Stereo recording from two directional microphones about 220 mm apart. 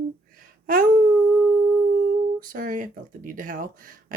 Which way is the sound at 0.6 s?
40° right (ahead or behind).